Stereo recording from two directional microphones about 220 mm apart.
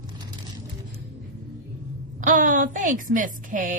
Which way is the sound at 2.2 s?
35° right (ahead or behind).